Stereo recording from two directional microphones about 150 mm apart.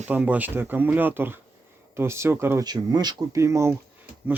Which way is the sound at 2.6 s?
25° right (ahead or behind).